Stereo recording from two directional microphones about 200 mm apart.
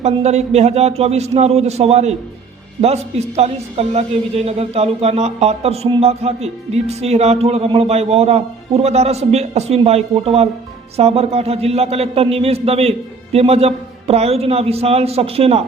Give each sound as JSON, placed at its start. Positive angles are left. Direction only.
{"t": 0.0, "sound": "a woman's voice", "side_deg": -35}